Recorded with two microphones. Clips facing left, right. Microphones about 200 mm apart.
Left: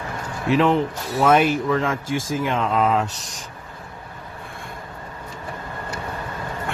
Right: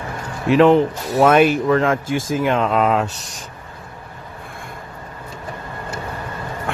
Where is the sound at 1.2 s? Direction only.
65° right (ahead or behind).